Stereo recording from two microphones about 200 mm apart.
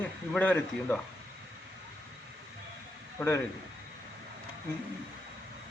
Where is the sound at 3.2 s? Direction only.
5° left (ahead or behind).